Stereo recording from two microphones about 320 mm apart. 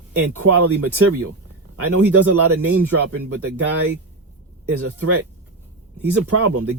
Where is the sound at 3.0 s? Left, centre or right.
Right.